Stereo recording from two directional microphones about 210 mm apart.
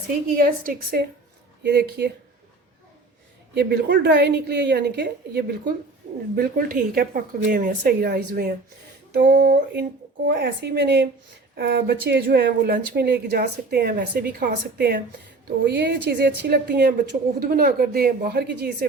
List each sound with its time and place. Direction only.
0.3 s speech: 40° right (ahead or behind)
3.5 s speech: 50° right (ahead or behind)